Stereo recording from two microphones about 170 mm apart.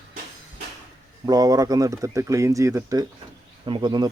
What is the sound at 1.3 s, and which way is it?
Speech, 20° right (ahead or behind).